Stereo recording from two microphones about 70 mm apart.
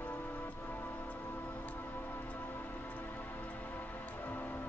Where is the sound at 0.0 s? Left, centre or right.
Left.